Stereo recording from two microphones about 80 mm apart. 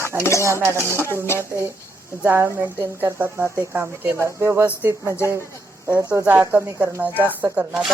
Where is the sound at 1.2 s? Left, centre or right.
Left.